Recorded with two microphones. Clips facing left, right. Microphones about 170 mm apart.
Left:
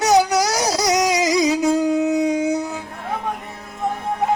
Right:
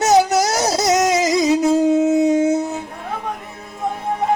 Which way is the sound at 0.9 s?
50° right (ahead or behind).